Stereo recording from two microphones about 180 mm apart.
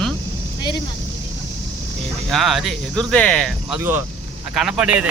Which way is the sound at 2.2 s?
Centre (ahead or behind).